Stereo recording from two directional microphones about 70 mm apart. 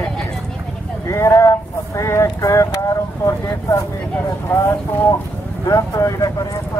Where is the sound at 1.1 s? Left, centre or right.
Left.